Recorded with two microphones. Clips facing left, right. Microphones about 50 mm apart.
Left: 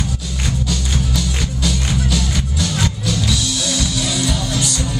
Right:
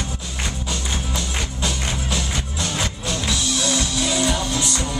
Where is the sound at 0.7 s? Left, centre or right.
Right.